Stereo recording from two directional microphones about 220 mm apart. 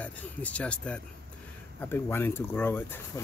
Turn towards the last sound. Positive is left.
turn(degrees=10)  # may be behind; listen again after turning